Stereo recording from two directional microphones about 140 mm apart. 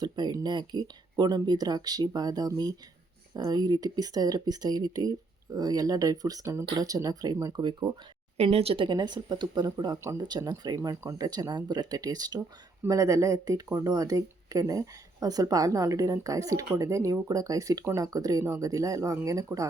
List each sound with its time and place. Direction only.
0.0 s speech: 30° right (ahead or behind)
8.4 s speech: 45° right (ahead or behind); by 19.6 s 25° right (ahead or behind)